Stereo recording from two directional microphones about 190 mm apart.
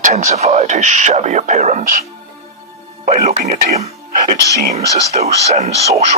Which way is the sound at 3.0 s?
40° right (ahead or behind).